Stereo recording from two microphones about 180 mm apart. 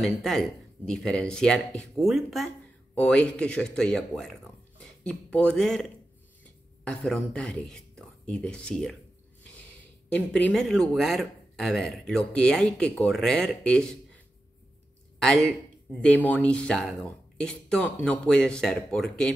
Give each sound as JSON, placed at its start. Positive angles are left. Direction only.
{"t": 0.0, "sound": "speech", "side_deg": 0}
{"t": 10.0, "sound": "speech", "side_deg": 5}